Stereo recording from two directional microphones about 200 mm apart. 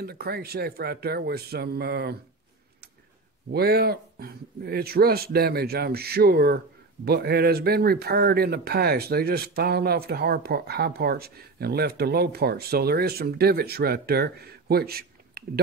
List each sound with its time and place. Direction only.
0.0 s speech: 50° right (ahead or behind)
3.5 s speech: 50° right (ahead or behind)